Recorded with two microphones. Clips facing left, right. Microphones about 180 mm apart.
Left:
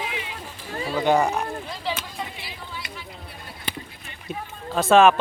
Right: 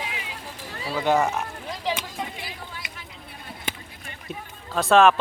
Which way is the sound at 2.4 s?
45° right (ahead or behind).